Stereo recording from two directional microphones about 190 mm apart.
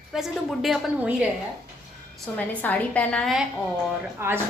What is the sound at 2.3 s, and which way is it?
A woman's voice, 10° left (ahead or behind).